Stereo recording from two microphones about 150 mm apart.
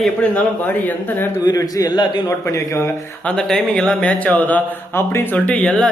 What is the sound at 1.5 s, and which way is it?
A man's voice, 25° left (ahead or behind).